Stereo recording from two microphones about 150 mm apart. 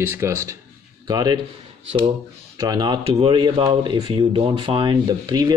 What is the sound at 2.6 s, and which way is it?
Speech, 30° right (ahead or behind).